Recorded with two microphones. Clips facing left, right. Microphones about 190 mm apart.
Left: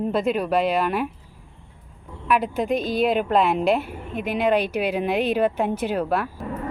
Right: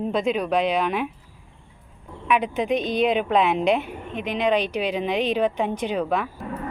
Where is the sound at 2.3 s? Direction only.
Centre (ahead or behind).